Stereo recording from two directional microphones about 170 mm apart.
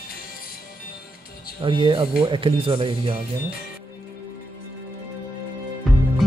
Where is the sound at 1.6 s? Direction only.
30° right (ahead or behind).